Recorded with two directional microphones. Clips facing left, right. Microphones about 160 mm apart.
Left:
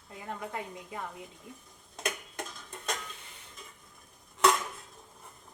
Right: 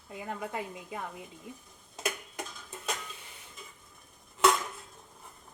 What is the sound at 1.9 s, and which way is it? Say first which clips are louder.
Tick-tock: even; 5° right (ahead or behind).